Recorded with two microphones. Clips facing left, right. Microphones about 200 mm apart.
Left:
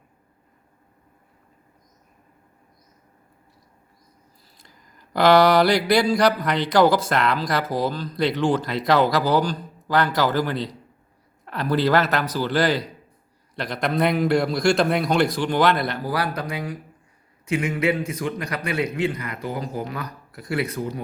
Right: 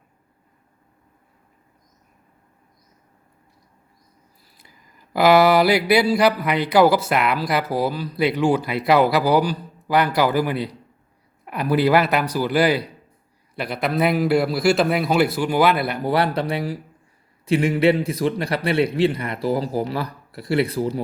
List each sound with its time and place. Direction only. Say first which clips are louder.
4.5 s a sound: even; 5° right (ahead or behind)
13.6 s a man's voice: right 1 dB; 5° right (ahead or behind)
16.0 s a man's voice: right 5 dB; 25° right (ahead or behind)